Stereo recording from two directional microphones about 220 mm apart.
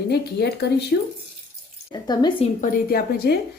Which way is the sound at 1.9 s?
20° left (ahead or behind).